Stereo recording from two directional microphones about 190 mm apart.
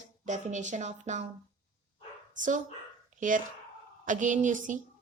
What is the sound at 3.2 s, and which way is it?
A woman's voice, 45° right (ahead or behind).